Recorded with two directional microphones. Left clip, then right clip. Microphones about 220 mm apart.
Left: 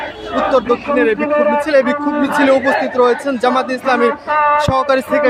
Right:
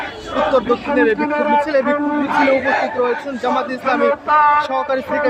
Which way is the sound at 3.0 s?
20° left (ahead or behind).